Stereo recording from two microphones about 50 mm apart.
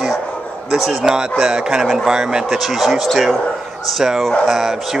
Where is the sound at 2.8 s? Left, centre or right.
Centre.